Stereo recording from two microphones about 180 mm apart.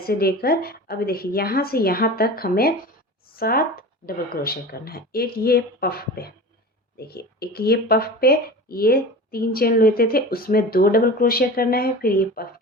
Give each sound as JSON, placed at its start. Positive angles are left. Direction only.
{"t": 0.0, "sound": "speech", "side_deg": 60}